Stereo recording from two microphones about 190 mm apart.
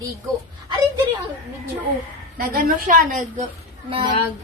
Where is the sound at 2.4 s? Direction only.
50° right (ahead or behind).